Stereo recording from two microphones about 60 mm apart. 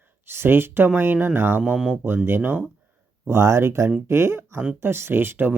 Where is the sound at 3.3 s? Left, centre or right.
Right.